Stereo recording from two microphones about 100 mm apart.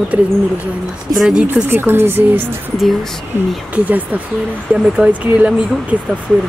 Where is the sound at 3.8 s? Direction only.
15° right (ahead or behind).